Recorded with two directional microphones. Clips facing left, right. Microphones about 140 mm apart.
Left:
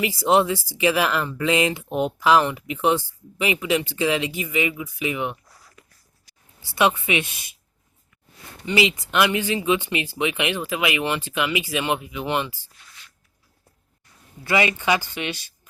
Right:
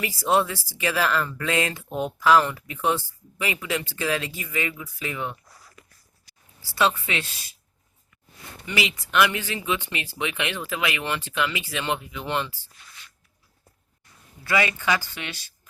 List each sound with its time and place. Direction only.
0.0 s speech: 20° left (ahead or behind)
6.6 s speech: 20° left (ahead or behind)
8.6 s speech: 25° left (ahead or behind)
14.4 s speech: 20° left (ahead or behind)